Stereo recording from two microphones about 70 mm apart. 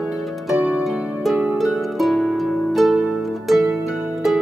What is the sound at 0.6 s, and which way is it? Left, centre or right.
Harp, centre.